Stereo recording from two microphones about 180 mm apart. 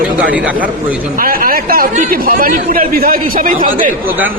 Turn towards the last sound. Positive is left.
turn(degrees=-50)  # may be behind; listen again after turning